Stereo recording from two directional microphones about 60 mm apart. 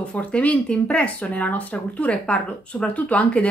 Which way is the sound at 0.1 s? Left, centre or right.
Left.